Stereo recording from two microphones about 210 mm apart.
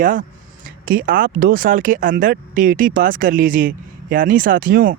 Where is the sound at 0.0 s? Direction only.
40° right (ahead or behind).